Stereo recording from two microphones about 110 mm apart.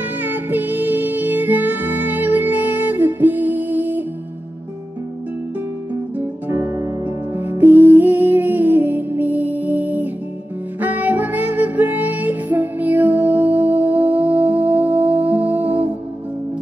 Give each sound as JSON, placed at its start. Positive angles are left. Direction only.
{"t": 0.2, "sound": "music", "side_deg": -15}
{"t": 6.1, "sound": "music", "side_deg": -25}